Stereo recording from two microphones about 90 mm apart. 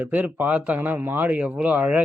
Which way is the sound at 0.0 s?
20° right (ahead or behind).